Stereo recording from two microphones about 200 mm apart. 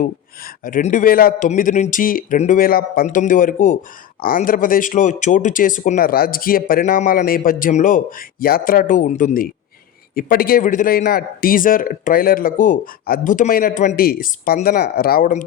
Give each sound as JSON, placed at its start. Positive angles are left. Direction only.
{"t": 0.0, "sound": "speech", "side_deg": 45}